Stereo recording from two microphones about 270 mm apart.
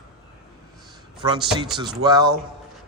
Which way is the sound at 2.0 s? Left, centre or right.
Centre.